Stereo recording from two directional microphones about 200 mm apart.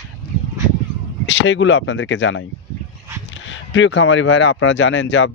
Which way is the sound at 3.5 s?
70° left (ahead or behind).